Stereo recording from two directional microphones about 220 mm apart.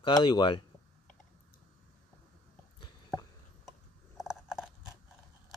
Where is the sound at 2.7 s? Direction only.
20° left (ahead or behind).